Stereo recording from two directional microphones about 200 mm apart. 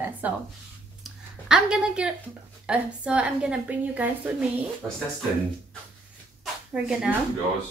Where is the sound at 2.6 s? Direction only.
5° right (ahead or behind).